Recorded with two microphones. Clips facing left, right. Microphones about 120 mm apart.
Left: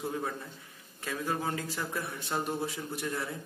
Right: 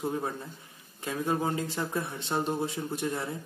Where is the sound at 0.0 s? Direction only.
25° right (ahead or behind).